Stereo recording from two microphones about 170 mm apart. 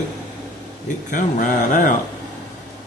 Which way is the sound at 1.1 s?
50° left (ahead or behind).